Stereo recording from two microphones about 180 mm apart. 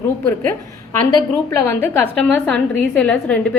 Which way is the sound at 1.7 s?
10° left (ahead or behind).